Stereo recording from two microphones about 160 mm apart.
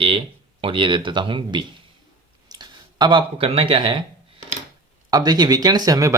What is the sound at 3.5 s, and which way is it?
Speech, 35° right (ahead or behind).